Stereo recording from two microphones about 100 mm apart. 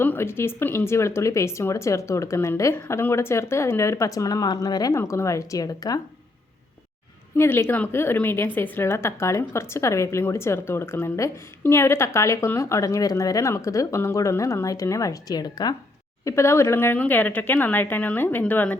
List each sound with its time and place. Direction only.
0.0 s a woman's voice: 20° left (ahead or behind); by 6.0 s 40° left (ahead or behind)
7.3 s a woman's voice: 25° left (ahead or behind); by 15.7 s 40° left (ahead or behind)
16.2 s a woman's voice: 30° left (ahead or behind)